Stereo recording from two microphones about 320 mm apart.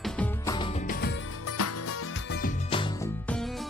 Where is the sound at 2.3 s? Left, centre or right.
Left.